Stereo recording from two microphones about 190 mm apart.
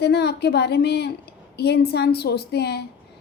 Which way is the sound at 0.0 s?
60° left (ahead or behind).